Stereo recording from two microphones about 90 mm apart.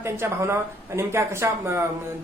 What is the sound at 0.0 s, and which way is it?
A woman's voice, 30° right (ahead or behind).